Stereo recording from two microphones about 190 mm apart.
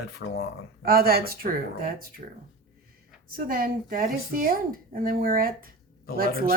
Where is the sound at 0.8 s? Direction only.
50° right (ahead or behind).